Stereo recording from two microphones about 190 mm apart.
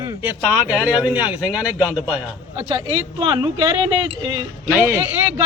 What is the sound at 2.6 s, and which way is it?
Speech, 25° right (ahead or behind).